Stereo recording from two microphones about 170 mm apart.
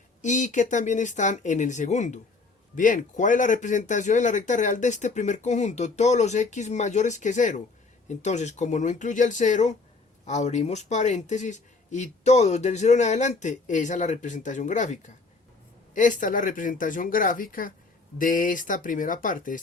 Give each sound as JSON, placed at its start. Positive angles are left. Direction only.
{"t": 0.2, "sound": "speech", "side_deg": 45}